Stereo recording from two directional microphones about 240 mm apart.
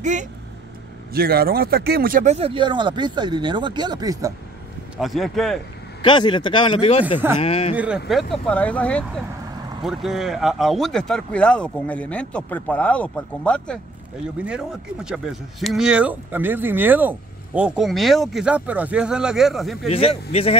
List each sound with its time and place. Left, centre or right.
0.0 s speech: right; by 4.3 s centre
4.9 s speech: centre
6.0 s speech: centre
7.7 s speech: centre
19.9 s speech: left